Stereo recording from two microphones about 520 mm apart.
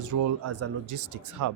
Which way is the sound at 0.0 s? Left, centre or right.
Right.